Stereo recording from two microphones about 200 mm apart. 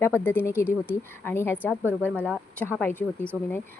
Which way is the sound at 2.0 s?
5° left (ahead or behind).